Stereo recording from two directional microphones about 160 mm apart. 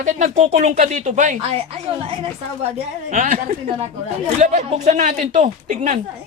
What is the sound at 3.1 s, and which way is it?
Speech, 50° right (ahead or behind).